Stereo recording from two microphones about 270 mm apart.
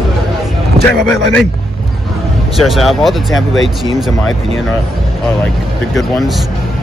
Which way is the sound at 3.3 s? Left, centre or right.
Left.